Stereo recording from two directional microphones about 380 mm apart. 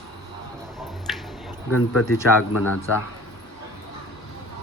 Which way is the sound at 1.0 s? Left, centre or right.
Centre.